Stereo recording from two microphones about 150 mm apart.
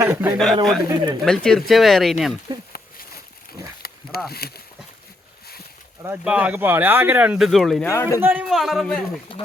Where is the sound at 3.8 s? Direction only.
90° left.